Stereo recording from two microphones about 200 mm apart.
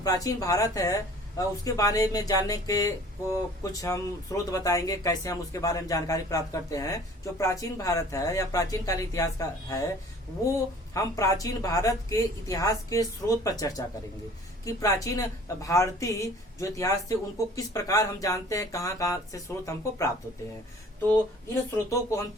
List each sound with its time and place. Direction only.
0.0 s speech: 20° left (ahead or behind)
10.9 s speech: 15° left (ahead or behind)
21.8 s speech: 15° left (ahead or behind)